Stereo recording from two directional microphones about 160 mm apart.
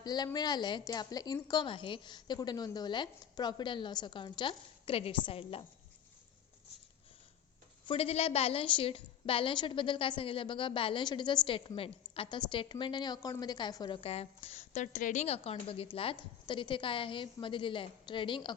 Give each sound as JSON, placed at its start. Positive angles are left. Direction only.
{"t": 0.0, "sound": "a woman's voice", "side_deg": 25}
{"t": 7.9, "sound": "a woman's voice", "side_deg": 40}